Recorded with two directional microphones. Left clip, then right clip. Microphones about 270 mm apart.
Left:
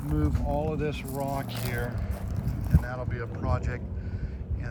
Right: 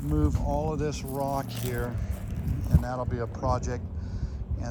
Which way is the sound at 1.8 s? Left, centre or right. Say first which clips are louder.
Even; centre.